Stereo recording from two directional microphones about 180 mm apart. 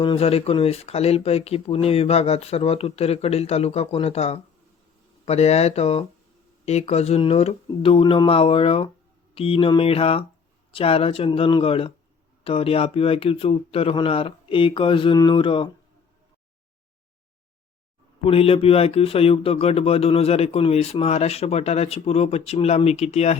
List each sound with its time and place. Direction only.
0.0 s speech: 30° left (ahead or behind)
18.2 s speech: 30° left (ahead or behind)